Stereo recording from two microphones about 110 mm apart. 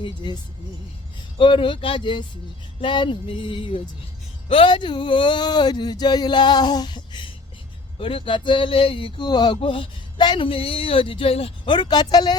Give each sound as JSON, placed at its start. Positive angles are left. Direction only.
{"t": 0.0, "sound": "speech", "side_deg": 45}
{"t": 1.4, "sound": "speech", "side_deg": 50}
{"t": 7.9, "sound": "speech", "side_deg": 55}
{"t": 9.6, "sound": "speech", "side_deg": 55}
{"t": 11.7, "sound": "speech", "side_deg": 40}